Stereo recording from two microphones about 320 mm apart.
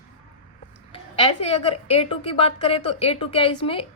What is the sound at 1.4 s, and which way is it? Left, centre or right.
A woman's voice, centre.